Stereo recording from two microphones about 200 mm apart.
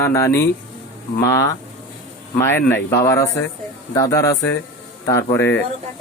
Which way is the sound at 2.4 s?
10° left (ahead or behind).